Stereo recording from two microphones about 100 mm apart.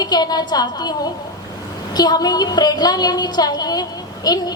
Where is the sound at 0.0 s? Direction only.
40° left (ahead or behind).